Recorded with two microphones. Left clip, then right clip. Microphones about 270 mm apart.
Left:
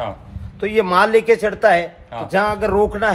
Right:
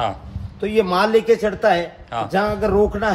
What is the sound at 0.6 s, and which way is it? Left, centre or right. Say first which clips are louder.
A man's voice: left 3 dB; left.